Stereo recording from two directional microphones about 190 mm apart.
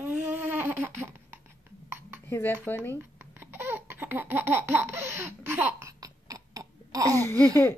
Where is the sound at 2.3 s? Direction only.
10° left (ahead or behind).